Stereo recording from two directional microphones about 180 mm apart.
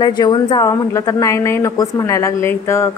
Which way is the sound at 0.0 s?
25° left (ahead or behind).